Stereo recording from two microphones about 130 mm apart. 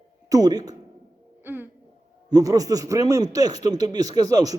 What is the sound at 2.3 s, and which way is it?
Speech, 25° right (ahead or behind).